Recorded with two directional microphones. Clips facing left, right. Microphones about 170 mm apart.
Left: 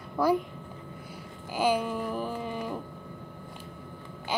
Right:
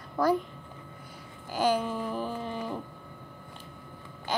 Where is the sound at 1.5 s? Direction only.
10° left (ahead or behind).